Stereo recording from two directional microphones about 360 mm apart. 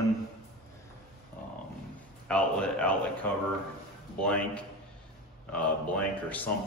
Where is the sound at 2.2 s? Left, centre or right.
Centre.